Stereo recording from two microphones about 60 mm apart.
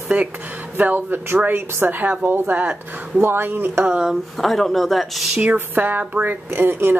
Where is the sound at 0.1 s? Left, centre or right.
Right.